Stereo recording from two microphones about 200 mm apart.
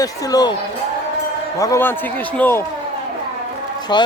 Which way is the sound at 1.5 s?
15° left (ahead or behind).